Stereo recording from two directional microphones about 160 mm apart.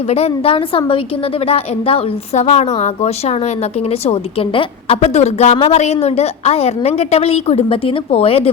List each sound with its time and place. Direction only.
0.1 s a woman's voice: 40° left (ahead or behind)